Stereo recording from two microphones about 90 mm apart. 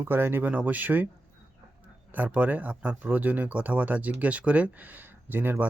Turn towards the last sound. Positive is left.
turn(degrees=-20)  # may be behind; listen again after turning